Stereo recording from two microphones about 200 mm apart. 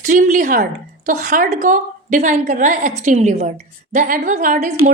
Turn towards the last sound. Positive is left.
turn(degrees=-40)  # may be behind; listen again after turning